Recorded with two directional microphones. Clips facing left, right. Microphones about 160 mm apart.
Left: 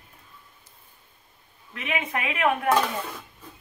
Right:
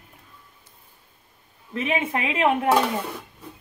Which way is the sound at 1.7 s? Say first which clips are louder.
Right 5 dB; 30° right (ahead or behind).